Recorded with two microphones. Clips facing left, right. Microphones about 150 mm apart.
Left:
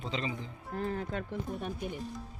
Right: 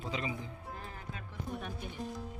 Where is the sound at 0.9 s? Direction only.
60° left (ahead or behind).